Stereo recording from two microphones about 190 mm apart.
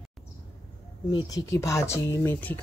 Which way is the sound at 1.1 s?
20° left (ahead or behind).